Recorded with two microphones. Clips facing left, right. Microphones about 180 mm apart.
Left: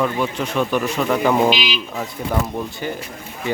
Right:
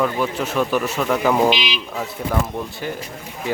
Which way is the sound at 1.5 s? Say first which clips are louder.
Even; 20° right (ahead or behind).